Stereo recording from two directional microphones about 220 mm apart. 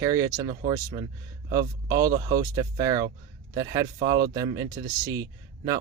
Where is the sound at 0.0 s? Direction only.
15° right (ahead or behind).